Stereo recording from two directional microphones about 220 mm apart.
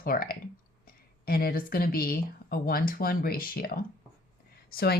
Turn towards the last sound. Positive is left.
turn(degrees=45)  # may be behind; listen again after turning